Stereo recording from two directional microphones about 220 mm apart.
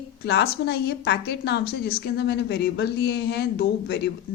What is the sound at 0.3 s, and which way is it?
A woman's voice, 50° left (ahead or behind).